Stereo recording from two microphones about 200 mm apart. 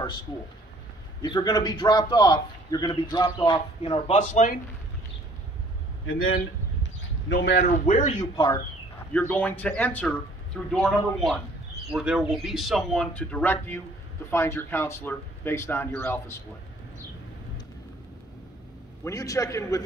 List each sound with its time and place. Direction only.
1.2 s a man's voice: 20° left (ahead or behind)
4.2 s speech: 40° left (ahead or behind)
6.0 s a man's voice: 90° left
6.8 s a sound: 60° left (ahead or behind)
7.8 s speech: 35° left (ahead or behind)
9.1 s speech: 10° left (ahead or behind)
19.0 s speech: 15° left (ahead or behind)